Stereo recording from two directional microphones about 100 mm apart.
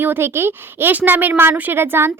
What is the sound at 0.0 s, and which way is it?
Speech, 20° right (ahead or behind).